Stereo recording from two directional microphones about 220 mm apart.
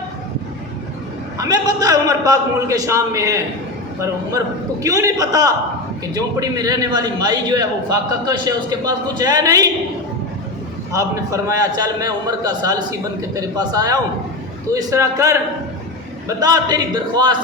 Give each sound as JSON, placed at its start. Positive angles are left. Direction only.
{"t": 1.4, "sound": "a man's voice", "side_deg": -15}
{"t": 10.9, "sound": "a man's voice", "side_deg": -15}
{"t": 16.4, "sound": "a man's voice", "side_deg": -20}